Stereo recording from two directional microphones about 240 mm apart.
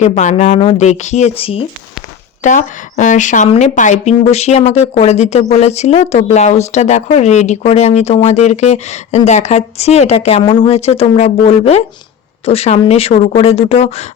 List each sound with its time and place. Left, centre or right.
0.0 s speech: left